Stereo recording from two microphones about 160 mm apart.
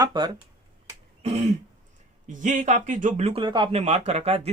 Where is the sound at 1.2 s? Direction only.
45° right (ahead or behind).